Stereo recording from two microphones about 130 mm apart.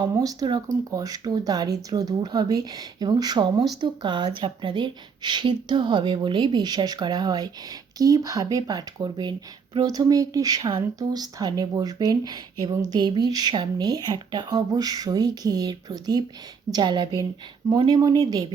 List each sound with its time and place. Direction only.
0.0 s speech: 30° right (ahead or behind)